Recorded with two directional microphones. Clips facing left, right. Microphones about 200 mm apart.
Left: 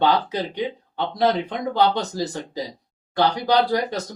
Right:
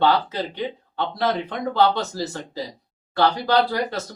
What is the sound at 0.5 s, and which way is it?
Speech, 15° left (ahead or behind).